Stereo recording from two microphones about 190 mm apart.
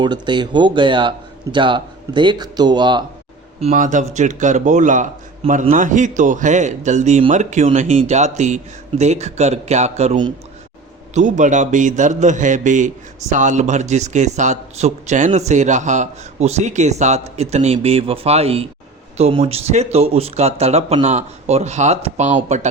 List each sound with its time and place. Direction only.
0.0 s speech: 25° right (ahead or behind)
3.6 s a man's voice: 40° right (ahead or behind)
11.1 s a man's voice: 40° right (ahead or behind)